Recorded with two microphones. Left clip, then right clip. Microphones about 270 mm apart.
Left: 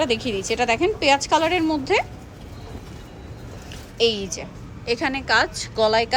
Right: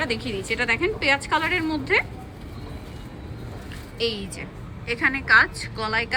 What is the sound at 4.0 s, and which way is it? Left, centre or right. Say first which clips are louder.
A woman's voice: left 6 dB; centre.